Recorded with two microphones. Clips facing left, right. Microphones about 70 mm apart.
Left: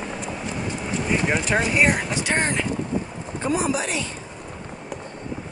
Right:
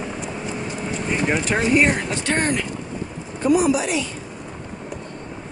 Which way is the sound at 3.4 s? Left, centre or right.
Left.